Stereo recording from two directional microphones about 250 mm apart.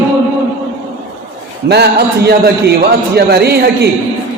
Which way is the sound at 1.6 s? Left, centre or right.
Right.